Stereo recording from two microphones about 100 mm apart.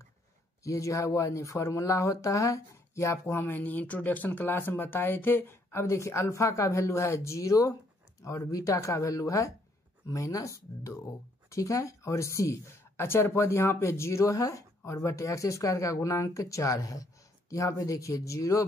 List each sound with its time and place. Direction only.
0.7 s speech: 30° left (ahead or behind)